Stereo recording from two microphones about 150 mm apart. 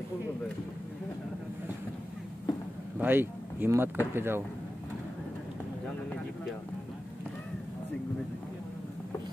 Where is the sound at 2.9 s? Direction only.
15° right (ahead or behind).